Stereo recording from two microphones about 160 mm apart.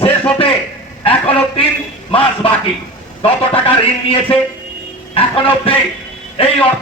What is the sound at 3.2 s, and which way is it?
A man's voice, 35° left (ahead or behind).